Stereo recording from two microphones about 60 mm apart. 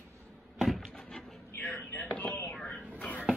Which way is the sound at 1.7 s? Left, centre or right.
Left.